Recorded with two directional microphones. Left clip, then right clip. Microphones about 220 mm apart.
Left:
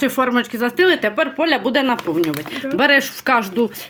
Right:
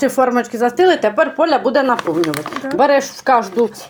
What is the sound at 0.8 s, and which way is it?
Speech, 30° left (ahead or behind).